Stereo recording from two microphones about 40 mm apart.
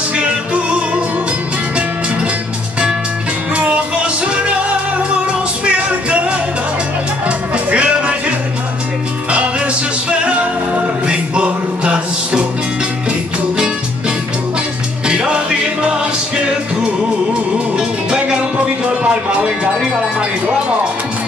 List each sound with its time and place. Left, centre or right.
0.7 s music: right
3.5 s music: right
10.0 s music: right
15.0 s music: right